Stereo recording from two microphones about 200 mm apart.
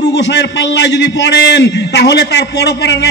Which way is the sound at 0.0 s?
60° left (ahead or behind).